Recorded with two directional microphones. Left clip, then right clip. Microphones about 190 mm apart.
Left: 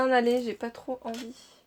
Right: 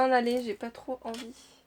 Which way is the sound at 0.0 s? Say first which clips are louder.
Left 1 dB; 25° left (ahead or behind).